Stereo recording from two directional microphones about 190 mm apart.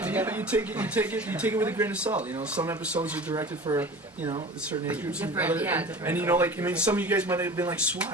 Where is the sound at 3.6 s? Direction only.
20° right (ahead or behind).